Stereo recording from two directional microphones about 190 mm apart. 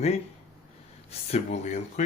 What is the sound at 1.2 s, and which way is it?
Speech, 35° left (ahead or behind).